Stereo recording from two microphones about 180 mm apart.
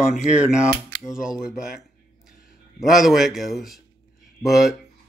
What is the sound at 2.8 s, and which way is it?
Speech, centre (ahead or behind).